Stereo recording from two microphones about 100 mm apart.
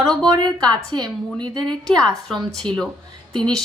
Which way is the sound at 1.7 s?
5° left (ahead or behind).